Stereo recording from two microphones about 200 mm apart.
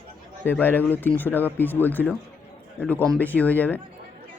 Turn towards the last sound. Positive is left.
turn(degrees=10)  # may be behind; listen again after turning